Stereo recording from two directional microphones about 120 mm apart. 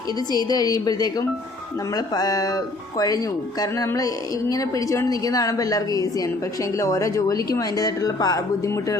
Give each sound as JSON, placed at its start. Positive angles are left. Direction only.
{"t": 0.3, "sound": "a woman's voice", "side_deg": 35}
{"t": 3.8, "sound": "a woman's voice", "side_deg": 30}